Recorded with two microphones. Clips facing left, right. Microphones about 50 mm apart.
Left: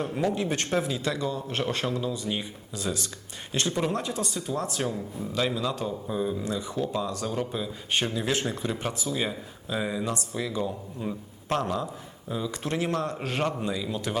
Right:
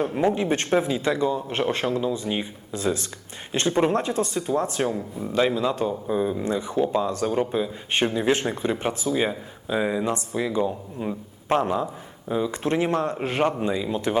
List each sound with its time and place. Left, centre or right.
0.0 s speech: right